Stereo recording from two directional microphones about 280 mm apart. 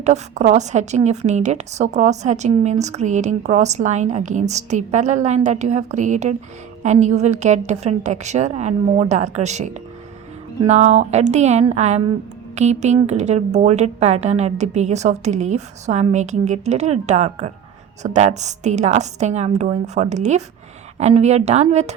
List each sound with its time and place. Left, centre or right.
0.0 s a woman's voice: right